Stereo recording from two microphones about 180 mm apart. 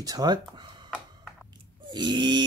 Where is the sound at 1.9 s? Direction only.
25° right (ahead or behind).